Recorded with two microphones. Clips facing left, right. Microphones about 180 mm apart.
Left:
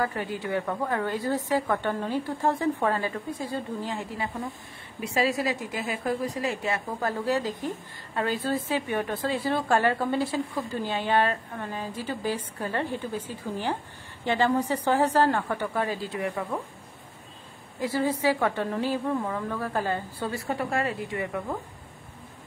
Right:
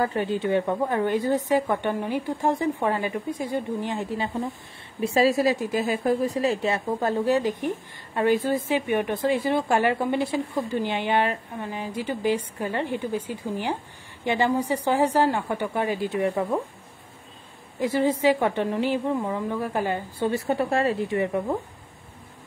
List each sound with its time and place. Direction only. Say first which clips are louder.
0.0 s a woman's voice: right 5 dB; 25° right (ahead or behind)
17.7 s speech: right 4 dB; 20° right (ahead or behind)